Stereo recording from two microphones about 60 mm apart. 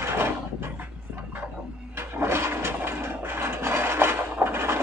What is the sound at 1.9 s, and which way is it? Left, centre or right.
Toilet flush, right.